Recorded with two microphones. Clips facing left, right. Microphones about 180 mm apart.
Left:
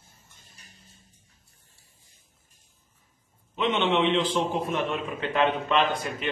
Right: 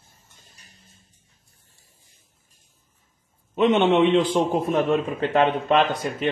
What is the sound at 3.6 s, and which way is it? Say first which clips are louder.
A man's voice: right 7 dB; 45° right (ahead or behind).